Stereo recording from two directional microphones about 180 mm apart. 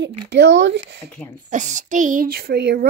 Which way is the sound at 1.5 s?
45° right (ahead or behind).